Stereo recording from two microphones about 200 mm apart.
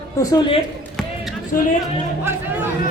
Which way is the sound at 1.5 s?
45° left (ahead or behind).